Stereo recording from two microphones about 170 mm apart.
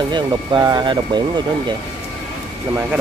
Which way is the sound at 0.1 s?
25° right (ahead or behind).